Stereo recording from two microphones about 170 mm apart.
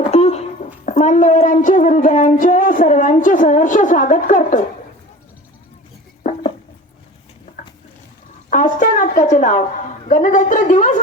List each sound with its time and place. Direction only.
0.0 s speech: 40° left (ahead or behind)
8.4 s speech: 50° left (ahead or behind)